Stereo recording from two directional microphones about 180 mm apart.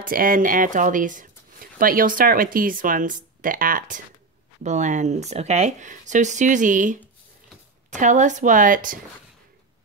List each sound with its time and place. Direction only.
0.0 s speech: 50° right (ahead or behind)